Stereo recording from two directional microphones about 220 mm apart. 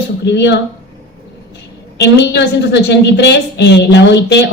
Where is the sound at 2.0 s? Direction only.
50° left (ahead or behind).